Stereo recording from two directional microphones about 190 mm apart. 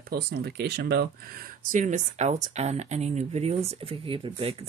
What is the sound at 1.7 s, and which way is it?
Speech, 40° right (ahead or behind).